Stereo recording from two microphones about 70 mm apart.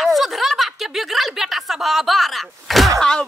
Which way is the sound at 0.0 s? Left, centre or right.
Centre.